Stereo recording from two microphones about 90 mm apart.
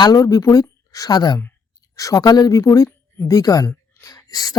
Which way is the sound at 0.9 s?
45° left (ahead or behind).